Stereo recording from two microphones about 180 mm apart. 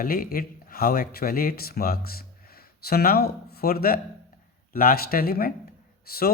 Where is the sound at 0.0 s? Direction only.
55° left (ahead or behind).